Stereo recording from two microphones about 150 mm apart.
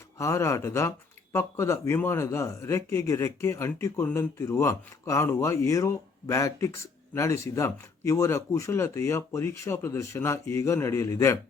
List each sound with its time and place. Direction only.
0.2 s speech: 20° left (ahead or behind)